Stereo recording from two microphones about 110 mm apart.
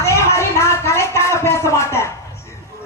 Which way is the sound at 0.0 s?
25° left (ahead or behind).